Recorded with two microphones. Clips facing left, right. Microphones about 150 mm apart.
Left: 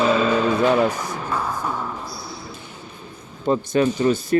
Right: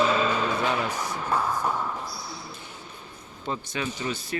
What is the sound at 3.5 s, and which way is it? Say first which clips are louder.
Speech: left 12 dB; 45° left (ahead or behind).